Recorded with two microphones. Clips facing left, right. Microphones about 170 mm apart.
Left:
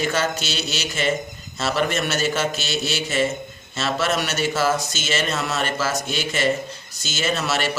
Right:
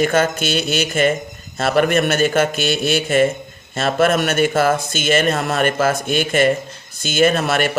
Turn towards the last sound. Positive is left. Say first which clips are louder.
# right 7 dB
turn(degrees=-55)  # may be behind; listen again after turning